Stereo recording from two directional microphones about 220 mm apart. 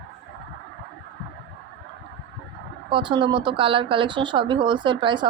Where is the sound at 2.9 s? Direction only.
20° right (ahead or behind).